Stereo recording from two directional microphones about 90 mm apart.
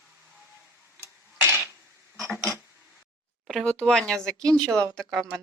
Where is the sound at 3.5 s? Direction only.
Centre (ahead or behind).